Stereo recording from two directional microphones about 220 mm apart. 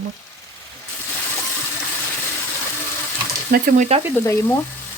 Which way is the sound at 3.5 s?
40° right (ahead or behind).